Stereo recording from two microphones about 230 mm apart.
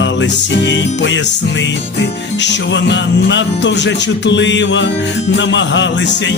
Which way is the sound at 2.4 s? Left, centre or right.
Left.